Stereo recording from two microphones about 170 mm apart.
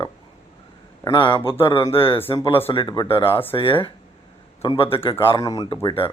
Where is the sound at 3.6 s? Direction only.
30° left (ahead or behind).